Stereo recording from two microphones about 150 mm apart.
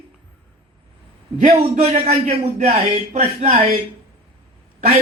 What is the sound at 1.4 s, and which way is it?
A man's voice, 45° right (ahead or behind).